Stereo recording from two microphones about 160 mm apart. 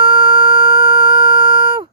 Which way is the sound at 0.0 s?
30° right (ahead or behind).